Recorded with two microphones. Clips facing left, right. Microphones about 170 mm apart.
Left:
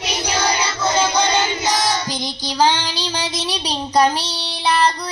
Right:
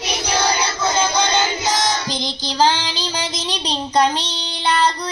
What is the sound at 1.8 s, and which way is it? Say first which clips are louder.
Child singing: even; 5° left (ahead or behind).